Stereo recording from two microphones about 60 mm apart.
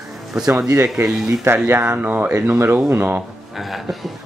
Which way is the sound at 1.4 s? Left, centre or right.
Right.